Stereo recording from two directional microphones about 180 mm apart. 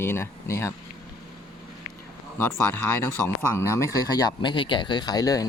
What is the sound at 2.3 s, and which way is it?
Speech, 15° left (ahead or behind).